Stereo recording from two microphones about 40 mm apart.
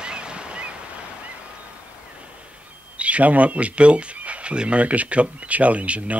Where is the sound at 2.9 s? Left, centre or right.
Right.